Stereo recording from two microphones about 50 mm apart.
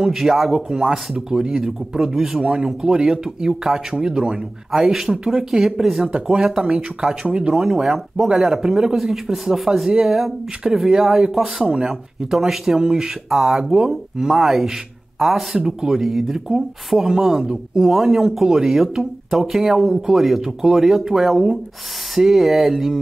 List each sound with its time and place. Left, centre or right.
0.0 s speech: centre